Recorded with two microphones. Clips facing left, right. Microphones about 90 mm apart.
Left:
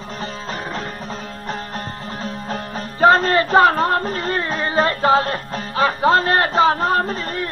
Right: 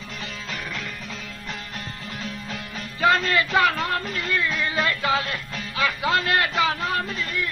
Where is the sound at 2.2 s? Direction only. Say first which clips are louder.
Left 9 dB; 40° left (ahead or behind).